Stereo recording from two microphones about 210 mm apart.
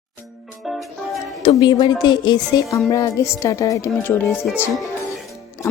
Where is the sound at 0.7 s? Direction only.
Centre (ahead or behind).